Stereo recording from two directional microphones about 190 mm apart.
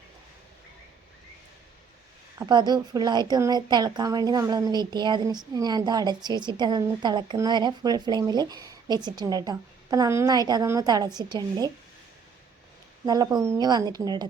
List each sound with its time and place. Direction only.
2.4 s a woman's voice: 20° right (ahead or behind)
13.1 s a woman's voice: 20° right (ahead or behind)